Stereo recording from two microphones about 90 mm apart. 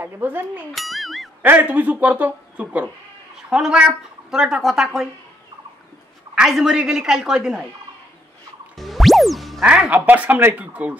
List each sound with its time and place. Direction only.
0.0 s speech: 20° right (ahead or behind)
0.7 s speech: centre (ahead or behind)
1.4 s a woman's voice: 20° right (ahead or behind); by 5.0 s 5° right (ahead or behind)
6.3 s a woman's voice: 5° right (ahead or behind)
8.7 s music: centre (ahead or behind)
9.8 s a woman's voice: 20° right (ahead or behind)